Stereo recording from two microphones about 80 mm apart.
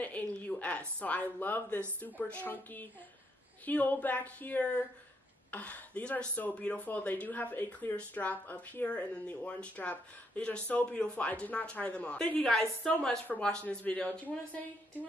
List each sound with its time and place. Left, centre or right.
0.0 s a woman's voice: centre